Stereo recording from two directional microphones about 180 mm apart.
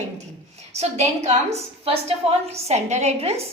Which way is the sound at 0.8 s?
40° right (ahead or behind).